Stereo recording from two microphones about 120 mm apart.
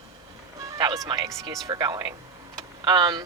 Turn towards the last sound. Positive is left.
turn(degrees=-35)  # may be behind; listen again after turning